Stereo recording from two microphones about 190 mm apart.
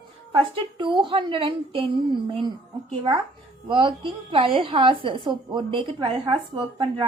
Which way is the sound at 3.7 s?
25° right (ahead or behind).